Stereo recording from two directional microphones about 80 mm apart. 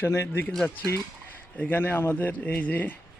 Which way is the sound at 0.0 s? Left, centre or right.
Left.